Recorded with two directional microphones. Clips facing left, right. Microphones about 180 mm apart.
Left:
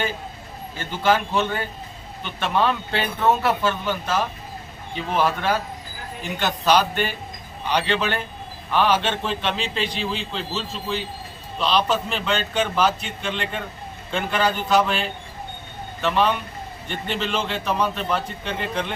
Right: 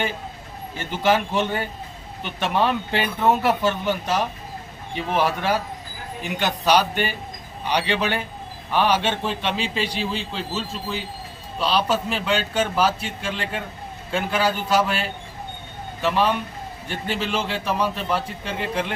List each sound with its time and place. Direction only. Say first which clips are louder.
0.8 s speech: even; 15° right (ahead or behind)